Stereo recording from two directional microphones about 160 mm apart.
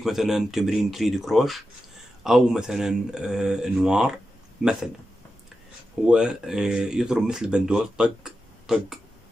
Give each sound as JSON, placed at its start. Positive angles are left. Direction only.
{"t": 0.0, "sound": "speech", "side_deg": 0}
{"t": 6.0, "sound": "speech", "side_deg": -5}